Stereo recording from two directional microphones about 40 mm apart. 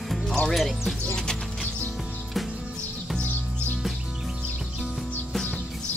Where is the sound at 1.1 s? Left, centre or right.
Centre.